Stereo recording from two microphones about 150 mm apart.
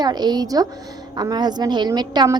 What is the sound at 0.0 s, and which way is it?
A woman's voice, 25° right (ahead or behind).